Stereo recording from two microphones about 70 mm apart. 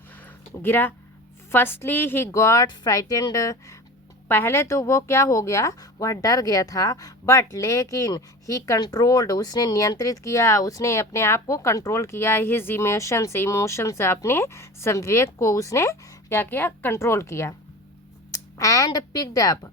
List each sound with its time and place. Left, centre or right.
0.2 s a sound: left
1.5 s a woman's voice: left
4.3 s speech: left
8.8 s a woman's voice: left
10.0 s speech: left
16.9 s speech: left
18.3 s a sound: left
18.9 s a woman's voice: left